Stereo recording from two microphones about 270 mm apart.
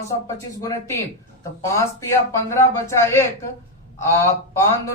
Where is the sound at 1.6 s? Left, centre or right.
Centre.